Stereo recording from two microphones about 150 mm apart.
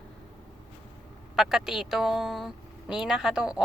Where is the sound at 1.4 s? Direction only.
5° right (ahead or behind).